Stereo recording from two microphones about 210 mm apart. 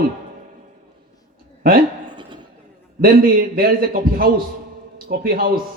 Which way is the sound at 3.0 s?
45° right (ahead or behind).